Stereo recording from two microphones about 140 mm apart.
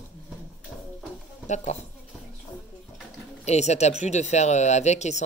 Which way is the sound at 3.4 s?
50° left (ahead or behind).